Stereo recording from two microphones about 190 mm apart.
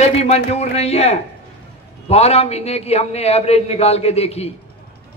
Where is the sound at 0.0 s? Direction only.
35° left (ahead or behind).